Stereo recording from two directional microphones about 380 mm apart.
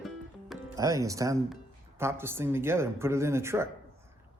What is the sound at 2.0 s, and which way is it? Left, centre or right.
Speech, centre.